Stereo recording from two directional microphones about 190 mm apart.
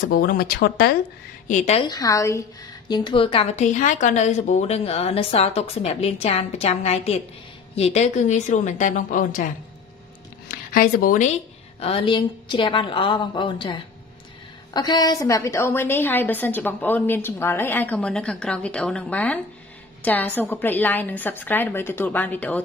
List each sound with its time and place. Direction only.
0.1 s speech: 50° left (ahead or behind)
1.5 s a woman's voice: 35° left (ahead or behind)
1.9 s a woman's voice: 20° left (ahead or behind); by 9.5 s 45° left (ahead or behind)
10.7 s speech: 50° left (ahead or behind)
11.8 s a woman's voice: 30° left (ahead or behind); by 22.6 s 10° left (ahead or behind)